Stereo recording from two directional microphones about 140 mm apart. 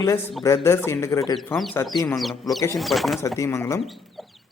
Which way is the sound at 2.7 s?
Centre (ahead or behind).